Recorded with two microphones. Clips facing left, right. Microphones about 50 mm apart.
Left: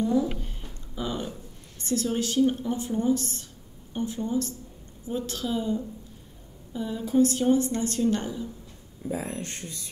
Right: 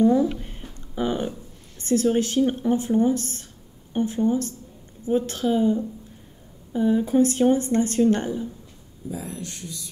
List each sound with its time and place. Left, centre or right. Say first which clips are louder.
0.0 s a sound: right 6 dB; right
1.8 s a woman's voice: right 7 dB; right
9.1 s speech: left 1 dB; left